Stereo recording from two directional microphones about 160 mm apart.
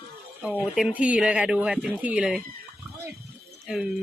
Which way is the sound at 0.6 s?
5° right (ahead or behind).